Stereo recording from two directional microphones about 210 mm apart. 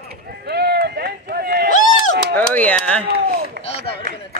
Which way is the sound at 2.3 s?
5° left (ahead or behind).